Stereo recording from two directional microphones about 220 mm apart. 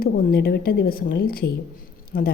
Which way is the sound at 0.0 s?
45° left (ahead or behind).